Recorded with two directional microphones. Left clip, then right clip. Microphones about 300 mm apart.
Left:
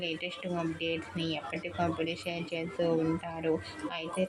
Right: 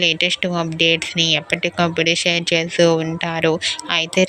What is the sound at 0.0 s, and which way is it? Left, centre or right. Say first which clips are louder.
Speech: right 19 dB; right.